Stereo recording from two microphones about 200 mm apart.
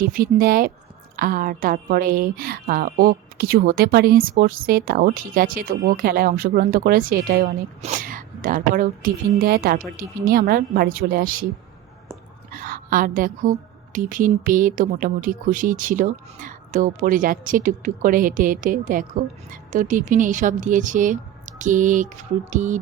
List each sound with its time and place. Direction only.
0.0 s a woman's voice: 45° right (ahead or behind)
12.5 s a woman's voice: 45° right (ahead or behind)